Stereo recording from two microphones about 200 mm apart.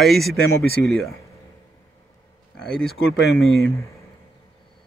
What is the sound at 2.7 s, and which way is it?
Speech, 5° left (ahead or behind).